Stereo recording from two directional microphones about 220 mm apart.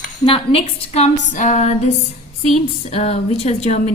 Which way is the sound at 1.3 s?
35° left (ahead or behind).